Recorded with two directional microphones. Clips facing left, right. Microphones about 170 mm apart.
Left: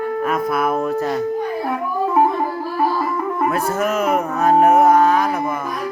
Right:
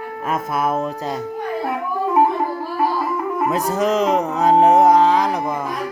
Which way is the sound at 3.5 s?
15° right (ahead or behind).